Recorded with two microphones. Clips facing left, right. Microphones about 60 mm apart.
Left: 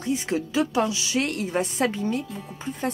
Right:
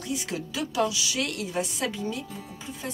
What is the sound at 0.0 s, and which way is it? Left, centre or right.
A woman's voice, left.